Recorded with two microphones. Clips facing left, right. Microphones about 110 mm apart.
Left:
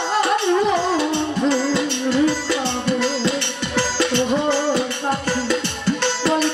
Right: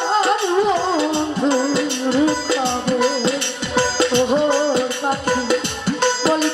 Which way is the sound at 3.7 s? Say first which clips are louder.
Right 3 dB; 15° right (ahead or behind).